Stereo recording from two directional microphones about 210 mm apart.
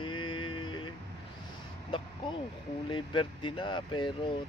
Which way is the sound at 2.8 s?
25° left (ahead or behind).